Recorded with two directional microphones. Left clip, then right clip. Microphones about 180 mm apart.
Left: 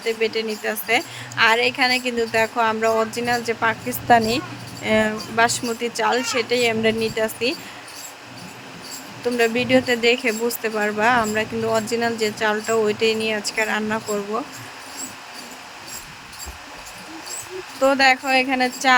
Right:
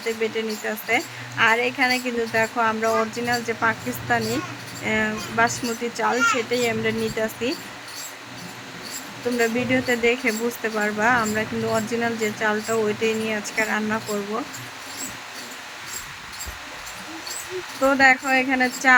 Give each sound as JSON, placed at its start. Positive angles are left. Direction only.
{"t": 0.2, "sound": "a woman's voice", "side_deg": 45}
{"t": 9.4, "sound": "a woman's voice", "side_deg": 45}
{"t": 17.8, "sound": "a woman's voice", "side_deg": 35}